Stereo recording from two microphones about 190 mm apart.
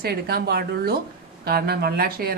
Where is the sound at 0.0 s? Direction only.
55° right (ahead or behind).